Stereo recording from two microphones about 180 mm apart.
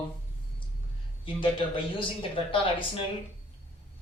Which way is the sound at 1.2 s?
30° left (ahead or behind).